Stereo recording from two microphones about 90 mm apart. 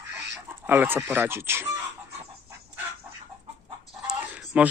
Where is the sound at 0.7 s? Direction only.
25° right (ahead or behind).